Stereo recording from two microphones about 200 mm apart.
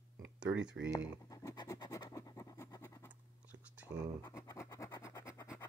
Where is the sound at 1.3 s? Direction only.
15° left (ahead or behind).